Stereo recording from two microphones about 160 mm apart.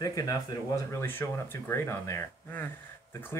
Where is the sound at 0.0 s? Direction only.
20° left (ahead or behind).